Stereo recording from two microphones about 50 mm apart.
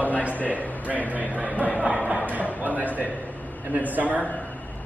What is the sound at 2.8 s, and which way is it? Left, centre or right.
Speech, right.